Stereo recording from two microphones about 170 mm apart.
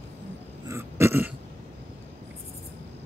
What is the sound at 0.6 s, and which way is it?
Throat clearing, 15° right (ahead or behind).